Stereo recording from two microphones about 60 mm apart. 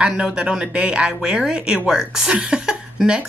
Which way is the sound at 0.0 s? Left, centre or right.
Centre.